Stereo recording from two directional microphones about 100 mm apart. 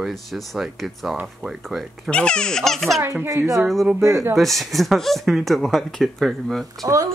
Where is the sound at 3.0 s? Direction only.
30° right (ahead or behind).